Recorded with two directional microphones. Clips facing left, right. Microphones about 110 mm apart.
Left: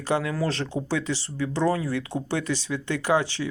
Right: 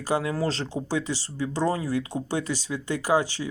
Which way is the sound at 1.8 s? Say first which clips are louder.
Right 1 dB; 40° right (ahead or behind).